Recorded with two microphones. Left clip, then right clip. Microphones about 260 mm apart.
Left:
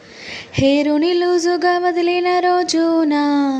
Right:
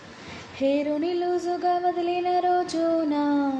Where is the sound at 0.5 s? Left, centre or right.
Left.